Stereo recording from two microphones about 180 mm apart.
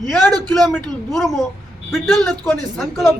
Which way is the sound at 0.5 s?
5° left (ahead or behind).